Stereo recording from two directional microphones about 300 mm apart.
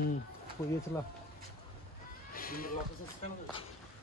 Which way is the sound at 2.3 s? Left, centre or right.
Left.